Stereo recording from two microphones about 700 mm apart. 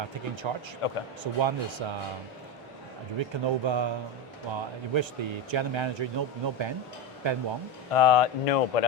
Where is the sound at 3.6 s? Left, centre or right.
Right.